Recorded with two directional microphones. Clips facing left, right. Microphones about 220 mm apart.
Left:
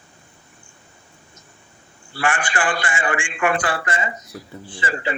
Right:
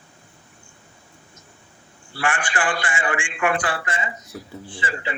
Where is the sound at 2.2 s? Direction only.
45° left (ahead or behind).